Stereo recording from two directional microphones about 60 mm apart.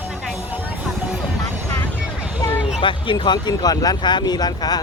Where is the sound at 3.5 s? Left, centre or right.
Left.